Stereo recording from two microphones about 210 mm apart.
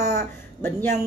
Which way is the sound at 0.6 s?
10° left (ahead or behind).